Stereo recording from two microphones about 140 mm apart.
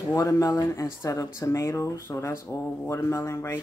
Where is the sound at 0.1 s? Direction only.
25° left (ahead or behind).